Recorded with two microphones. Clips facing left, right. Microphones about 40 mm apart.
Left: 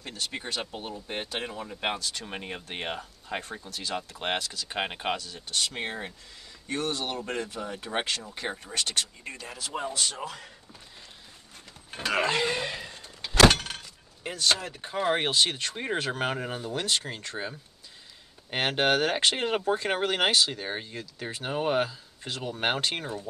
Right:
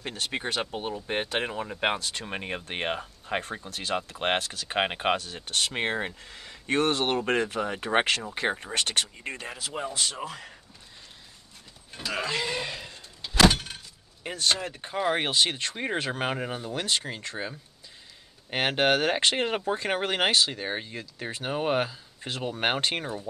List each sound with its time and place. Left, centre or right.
0.0 s speech: right
5.1 s speech: right
9.5 s speech: centre
11.9 s a sound: left
12.5 s a sound: centre
13.5 s vehicle: left
14.2 s speech: centre
15.3 s speech: centre